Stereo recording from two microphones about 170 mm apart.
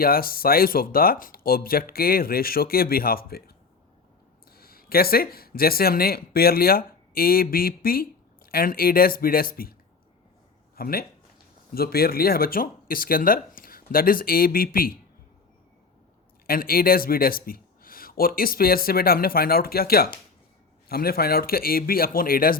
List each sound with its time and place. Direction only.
0.0 s speech: 60° left (ahead or behind)
4.5 s speech: 60° left (ahead or behind)
10.8 s speech: 60° left (ahead or behind)
16.5 s speech: 60° left (ahead or behind)